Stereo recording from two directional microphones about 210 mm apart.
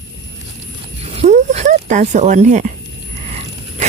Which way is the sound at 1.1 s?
35° right (ahead or behind).